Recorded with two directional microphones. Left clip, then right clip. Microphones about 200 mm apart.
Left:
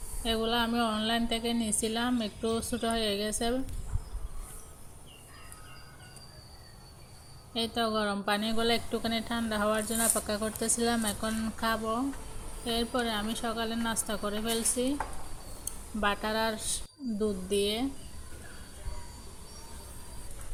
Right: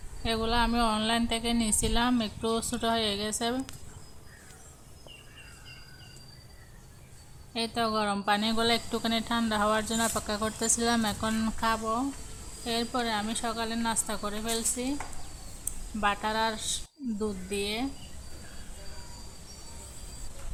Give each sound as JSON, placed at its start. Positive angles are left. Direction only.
{"t": 0.2, "sound": "a woman's voice", "side_deg": 0}
{"t": 7.5, "sound": "a woman's voice", "side_deg": 0}
{"t": 16.0, "sound": "a woman's voice", "side_deg": 0}